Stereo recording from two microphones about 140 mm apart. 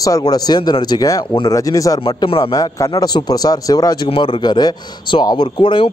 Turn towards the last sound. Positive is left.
turn(degrees=35)  # may be behind; listen again after turning